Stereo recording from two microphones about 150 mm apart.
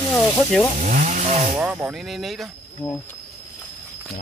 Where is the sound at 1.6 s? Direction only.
10° right (ahead or behind).